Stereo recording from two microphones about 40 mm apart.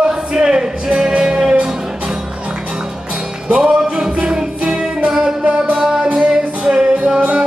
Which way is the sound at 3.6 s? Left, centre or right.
Right.